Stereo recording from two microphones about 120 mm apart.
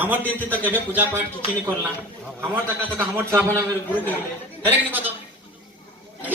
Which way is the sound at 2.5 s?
15° right (ahead or behind).